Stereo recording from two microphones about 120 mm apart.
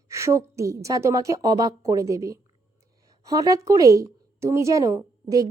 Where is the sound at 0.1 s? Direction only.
25° right (ahead or behind).